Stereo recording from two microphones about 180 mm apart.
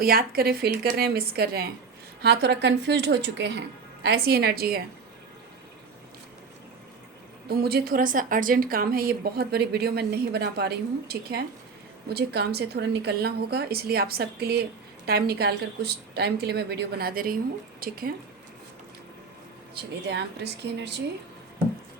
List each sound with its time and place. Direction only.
0.0 s a woman's voice: 55° right (ahead or behind); by 3.6 s 75° right (ahead or behind)
4.0 s a woman's voice: 60° right (ahead or behind)
7.4 s a woman's voice: 60° right (ahead or behind)
19.7 s a woman's voice: 65° right (ahead or behind)